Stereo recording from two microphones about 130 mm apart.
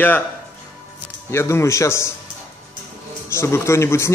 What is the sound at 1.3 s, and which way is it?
Speech, 20° left (ahead or behind).